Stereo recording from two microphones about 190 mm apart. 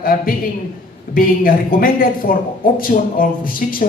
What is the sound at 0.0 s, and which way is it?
Speech, 50° left (ahead or behind).